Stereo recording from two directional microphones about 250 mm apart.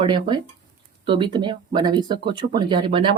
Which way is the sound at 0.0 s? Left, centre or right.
Centre.